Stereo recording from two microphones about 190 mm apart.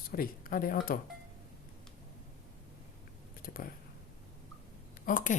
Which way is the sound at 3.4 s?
50° left (ahead or behind).